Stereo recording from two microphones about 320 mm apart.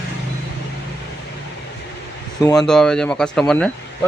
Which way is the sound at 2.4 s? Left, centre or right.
Centre.